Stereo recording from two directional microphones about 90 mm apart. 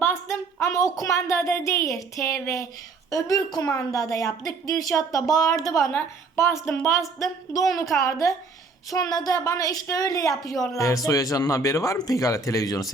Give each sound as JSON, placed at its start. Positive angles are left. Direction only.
{"t": 0.0, "sound": "a woman's voice", "side_deg": 30}
{"t": 5.9, "sound": "speech", "side_deg": 30}
{"t": 8.9, "sound": "a woman's voice", "side_deg": 45}